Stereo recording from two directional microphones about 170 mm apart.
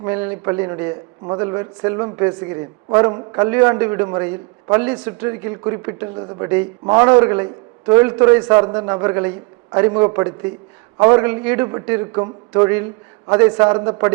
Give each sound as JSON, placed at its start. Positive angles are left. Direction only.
{"t": 0.0, "sound": "a man's voice", "side_deg": -10}